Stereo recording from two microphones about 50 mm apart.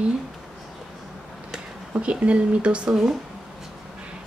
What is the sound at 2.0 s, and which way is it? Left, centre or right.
Speech, right.